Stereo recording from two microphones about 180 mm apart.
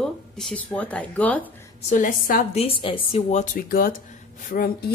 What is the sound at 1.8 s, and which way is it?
Speech, 45° left (ahead or behind).